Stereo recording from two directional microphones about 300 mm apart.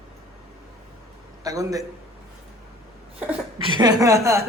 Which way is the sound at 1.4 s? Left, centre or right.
Centre.